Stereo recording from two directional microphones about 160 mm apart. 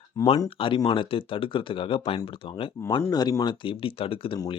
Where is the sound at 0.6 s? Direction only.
30° left (ahead or behind).